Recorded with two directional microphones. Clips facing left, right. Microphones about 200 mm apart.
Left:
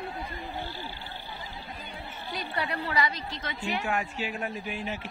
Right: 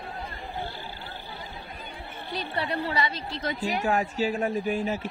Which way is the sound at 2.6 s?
30° right (ahead or behind).